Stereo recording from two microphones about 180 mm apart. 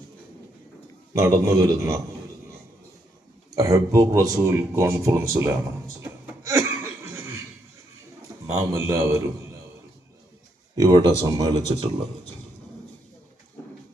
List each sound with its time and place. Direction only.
1.2 s speech: 20° right (ahead or behind)
3.5 s speech: 20° right (ahead or behind)
6.0 s a sound: 15° right (ahead or behind)
8.5 s speech: 15° right (ahead or behind)
10.8 s speech: 20° right (ahead or behind)